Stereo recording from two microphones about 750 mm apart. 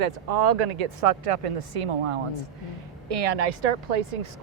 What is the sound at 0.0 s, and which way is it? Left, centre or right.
Speech, right.